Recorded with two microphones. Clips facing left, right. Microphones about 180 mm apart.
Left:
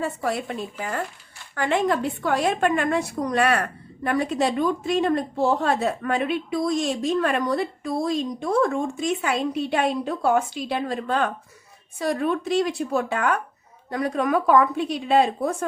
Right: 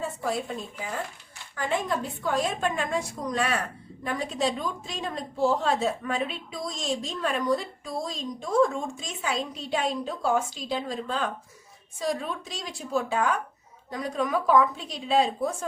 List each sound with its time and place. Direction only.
0.0 s a woman's voice: 70° left (ahead or behind)